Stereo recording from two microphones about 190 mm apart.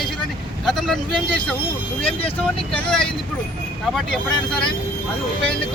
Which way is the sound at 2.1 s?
30° left (ahead or behind).